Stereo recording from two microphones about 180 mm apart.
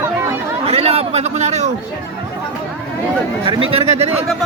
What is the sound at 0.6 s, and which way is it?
A man's voice, 35° right (ahead or behind).